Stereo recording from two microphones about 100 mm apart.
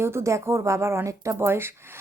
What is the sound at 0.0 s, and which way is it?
A woman's voice, 25° right (ahead or behind).